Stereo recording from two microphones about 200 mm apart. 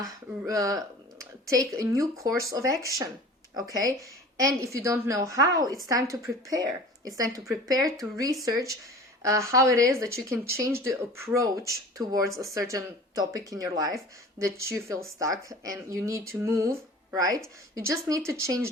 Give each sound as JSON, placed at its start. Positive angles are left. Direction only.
{"t": 0.4, "sound": "speech", "side_deg": -15}